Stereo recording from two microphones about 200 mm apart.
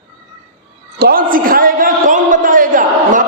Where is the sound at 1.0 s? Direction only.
45° right (ahead or behind).